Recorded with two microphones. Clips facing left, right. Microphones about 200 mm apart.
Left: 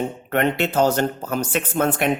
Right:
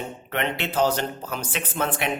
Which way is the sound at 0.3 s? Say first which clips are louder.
Left 7 dB; 45° left (ahead or behind).